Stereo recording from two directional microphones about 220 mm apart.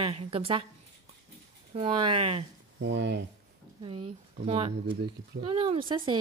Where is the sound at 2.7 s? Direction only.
55° right (ahead or behind).